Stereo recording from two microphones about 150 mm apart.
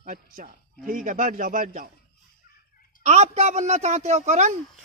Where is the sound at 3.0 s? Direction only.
45° right (ahead or behind).